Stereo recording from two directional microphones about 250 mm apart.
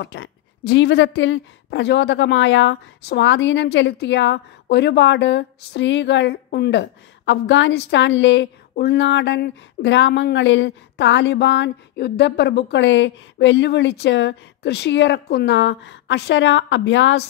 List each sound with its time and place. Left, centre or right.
0.0 s a woman's voice: left